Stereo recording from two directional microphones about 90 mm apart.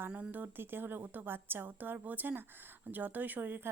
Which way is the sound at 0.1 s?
20° right (ahead or behind).